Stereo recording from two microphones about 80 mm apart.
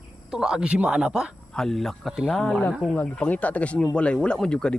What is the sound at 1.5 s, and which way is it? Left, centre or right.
Speech, centre.